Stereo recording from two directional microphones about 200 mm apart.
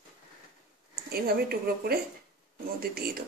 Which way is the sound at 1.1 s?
50° right (ahead or behind).